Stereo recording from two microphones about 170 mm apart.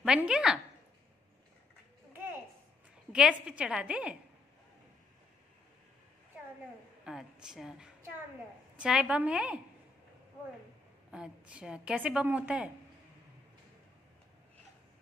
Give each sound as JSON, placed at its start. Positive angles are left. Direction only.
{"t": 0.0, "sound": "a woman's voice", "side_deg": -5}
{"t": 3.1, "sound": "a woman's voice", "side_deg": -5}
{"t": 7.1, "sound": "a woman's voice", "side_deg": -5}
{"t": 11.1, "sound": "a woman's voice", "side_deg": -5}